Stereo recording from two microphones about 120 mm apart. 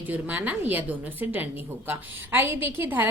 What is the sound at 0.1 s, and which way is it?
A woman's voice, 15° right (ahead or behind).